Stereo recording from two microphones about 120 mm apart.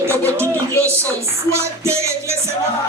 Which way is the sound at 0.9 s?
25° right (ahead or behind).